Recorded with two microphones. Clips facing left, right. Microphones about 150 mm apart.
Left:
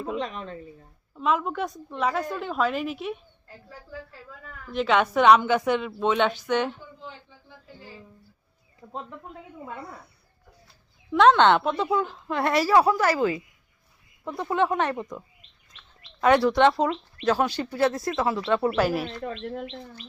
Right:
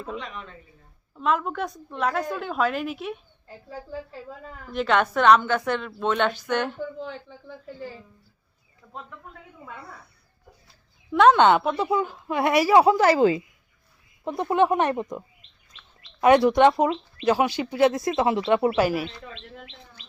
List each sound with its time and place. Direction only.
0.2 s speech: 35° left (ahead or behind)
1.1 s a woman's voice: centre (ahead or behind)
3.7 s speech: 25° right (ahead or behind)
4.7 s a woman's voice: centre (ahead or behind)
7.0 s speech: 65° right (ahead or behind)
8.9 s speech: 25° left (ahead or behind)
11.1 s speech: 5° right (ahead or behind); by 13.4 s 25° right (ahead or behind)
14.5 s speech: 15° right (ahead or behind)
16.2 s speech: 15° right (ahead or behind)
19.2 s speech: 50° left (ahead or behind)